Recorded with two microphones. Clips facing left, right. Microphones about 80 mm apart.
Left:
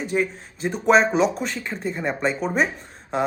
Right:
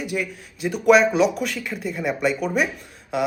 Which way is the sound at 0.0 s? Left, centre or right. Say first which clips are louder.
Left 3 dB; left.